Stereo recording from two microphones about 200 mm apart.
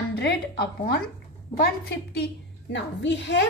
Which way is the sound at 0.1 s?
55° left (ahead or behind).